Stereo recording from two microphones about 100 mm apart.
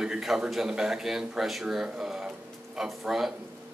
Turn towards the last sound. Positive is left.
turn(degrees=-5)  # may be behind; listen again after turning